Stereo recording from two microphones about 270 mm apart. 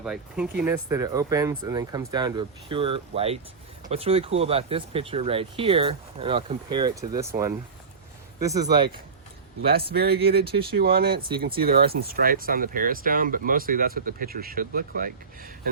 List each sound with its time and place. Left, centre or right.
0.0 s speech: centre
9.6 s speech: right